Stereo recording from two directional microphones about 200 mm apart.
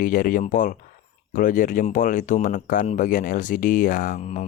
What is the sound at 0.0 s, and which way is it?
Speech, 45° left (ahead or behind).